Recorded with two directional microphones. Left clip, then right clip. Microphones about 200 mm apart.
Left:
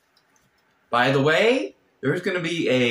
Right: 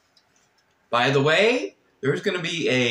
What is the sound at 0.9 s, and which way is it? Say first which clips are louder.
Speech: even; 10° right (ahead or behind).